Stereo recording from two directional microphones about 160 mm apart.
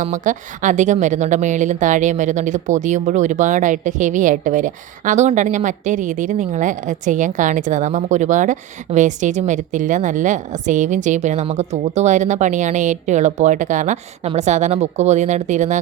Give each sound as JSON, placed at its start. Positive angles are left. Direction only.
{"t": 0.0, "sound": "a woman's voice", "side_deg": -50}